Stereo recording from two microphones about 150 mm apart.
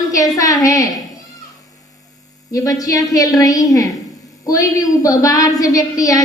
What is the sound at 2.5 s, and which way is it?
A woman's voice, 25° left (ahead or behind).